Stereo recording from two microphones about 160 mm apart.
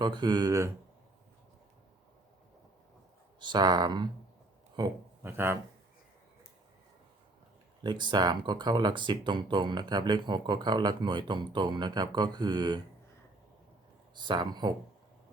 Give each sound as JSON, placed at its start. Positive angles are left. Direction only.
{"t": 0.0, "sound": "speech", "side_deg": -30}
{"t": 3.4, "sound": "speech", "side_deg": -25}
{"t": 5.2, "sound": "speech", "side_deg": -15}
{"t": 7.9, "sound": "speech", "side_deg": -30}
{"t": 14.2, "sound": "speech", "side_deg": -30}